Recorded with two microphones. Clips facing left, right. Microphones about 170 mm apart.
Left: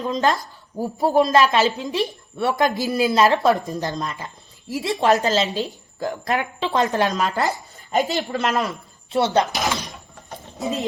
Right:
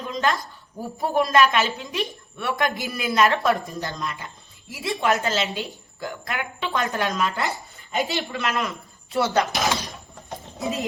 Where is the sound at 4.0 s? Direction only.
40° left (ahead or behind).